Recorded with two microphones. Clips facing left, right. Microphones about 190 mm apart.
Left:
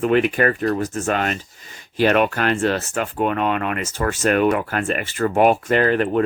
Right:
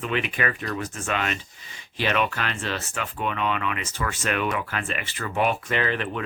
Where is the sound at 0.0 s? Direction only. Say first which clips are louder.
Left 10 dB; 45° left (ahead or behind).